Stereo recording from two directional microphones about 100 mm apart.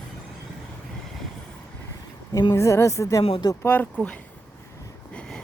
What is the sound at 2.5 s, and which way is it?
Speech, 30° left (ahead or behind).